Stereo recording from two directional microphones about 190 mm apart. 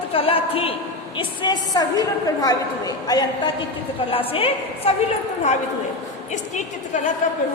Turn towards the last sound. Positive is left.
turn(degrees=40)  # may be behind; listen again after turning